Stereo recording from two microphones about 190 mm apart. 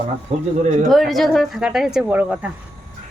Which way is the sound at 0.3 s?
35° right (ahead or behind).